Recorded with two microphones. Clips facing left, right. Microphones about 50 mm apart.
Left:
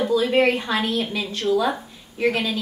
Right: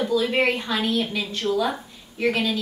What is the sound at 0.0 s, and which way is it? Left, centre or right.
A woman's voice, centre.